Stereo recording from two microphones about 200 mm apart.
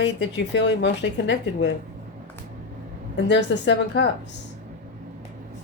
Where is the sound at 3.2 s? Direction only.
60° left (ahead or behind).